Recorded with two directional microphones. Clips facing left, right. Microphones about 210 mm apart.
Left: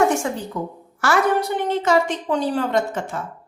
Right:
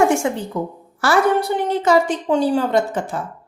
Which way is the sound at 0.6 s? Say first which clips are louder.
Right 3 dB; 25° right (ahead or behind).